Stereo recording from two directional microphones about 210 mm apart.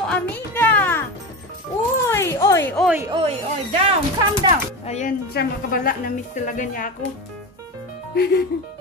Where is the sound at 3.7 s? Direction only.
25° right (ahead or behind).